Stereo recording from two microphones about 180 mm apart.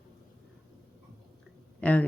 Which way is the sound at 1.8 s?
10° left (ahead or behind).